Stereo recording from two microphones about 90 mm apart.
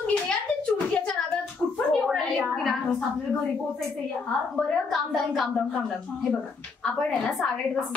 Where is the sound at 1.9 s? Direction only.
Centre (ahead or behind).